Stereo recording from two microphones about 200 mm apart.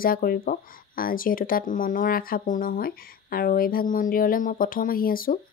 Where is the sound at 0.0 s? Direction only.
45° left (ahead or behind).